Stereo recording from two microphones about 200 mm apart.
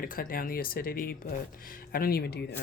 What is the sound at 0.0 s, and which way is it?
Speech, 45° left (ahead or behind).